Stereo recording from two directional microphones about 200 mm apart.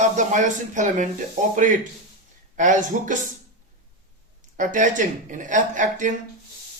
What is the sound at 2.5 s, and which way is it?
Speech, 40° right (ahead or behind).